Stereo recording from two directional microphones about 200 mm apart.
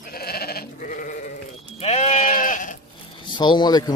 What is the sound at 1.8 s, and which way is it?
Sheep, 35° left (ahead or behind).